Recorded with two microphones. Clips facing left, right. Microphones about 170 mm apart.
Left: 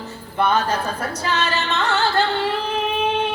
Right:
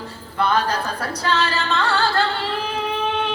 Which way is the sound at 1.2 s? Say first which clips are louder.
Right 2 dB; 20° left (ahead or behind).